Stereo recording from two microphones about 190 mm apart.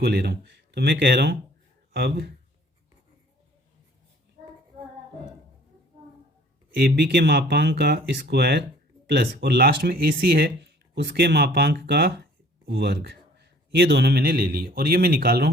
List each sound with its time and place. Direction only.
0.0 s speech: 55° right (ahead or behind)
6.7 s a man's voice: 55° right (ahead or behind)